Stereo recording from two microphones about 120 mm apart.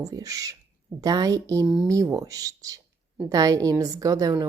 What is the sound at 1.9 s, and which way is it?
A woman's voice, 30° right (ahead or behind).